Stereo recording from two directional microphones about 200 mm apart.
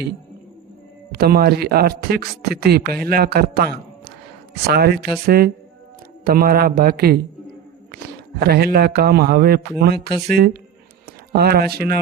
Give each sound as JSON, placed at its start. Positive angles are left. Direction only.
{"t": 1.1, "sound": "speech", "side_deg": -50}